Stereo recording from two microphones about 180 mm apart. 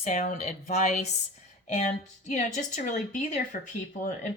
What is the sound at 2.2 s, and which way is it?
Speech, 40° left (ahead or behind).